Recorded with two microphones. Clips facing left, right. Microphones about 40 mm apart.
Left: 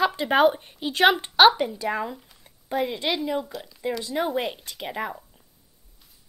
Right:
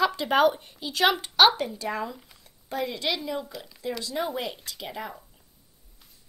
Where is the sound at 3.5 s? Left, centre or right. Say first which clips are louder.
Left 4 dB; centre.